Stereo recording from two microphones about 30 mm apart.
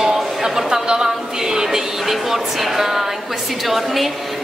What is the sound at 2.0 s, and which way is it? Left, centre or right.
A woman's voice, centre.